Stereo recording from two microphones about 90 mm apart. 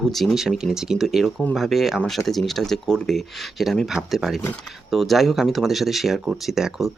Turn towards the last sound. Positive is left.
turn(degrees=-5)  # may be behind; listen again after turning